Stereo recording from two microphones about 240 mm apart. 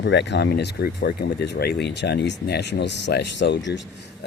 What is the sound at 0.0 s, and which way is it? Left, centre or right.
A man's voice, left.